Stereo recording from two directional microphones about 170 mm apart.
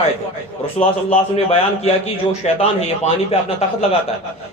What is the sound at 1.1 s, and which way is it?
A man's voice, 35° left (ahead or behind).